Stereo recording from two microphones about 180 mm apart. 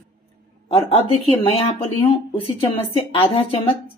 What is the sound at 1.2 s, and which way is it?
A woman's voice, 30° left (ahead or behind).